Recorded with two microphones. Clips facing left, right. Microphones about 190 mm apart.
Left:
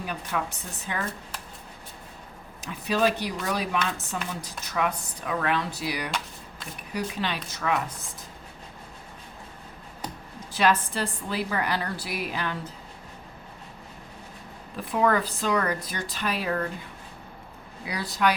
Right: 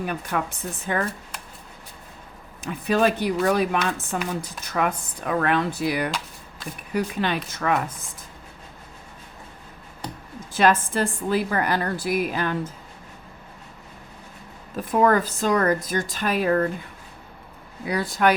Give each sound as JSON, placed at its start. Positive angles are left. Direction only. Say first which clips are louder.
{"t": 0.0, "sound": "a woman's voice", "louder": "right 4 dB", "side_deg": -55}
{"t": 2.6, "sound": "a woman's voice", "louder": "right 4 dB", "side_deg": -55}
{"t": 10.5, "sound": "a woman's voice", "louder": "right 4 dB", "side_deg": -50}
{"t": 14.8, "sound": "a woman's voice", "louder": "right 4 dB", "side_deg": -45}
{"t": 17.8, "sound": "a woman's voice", "louder": "right 5 dB", "side_deg": -50}